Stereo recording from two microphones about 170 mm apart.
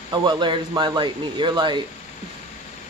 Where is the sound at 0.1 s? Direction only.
25° right (ahead or behind).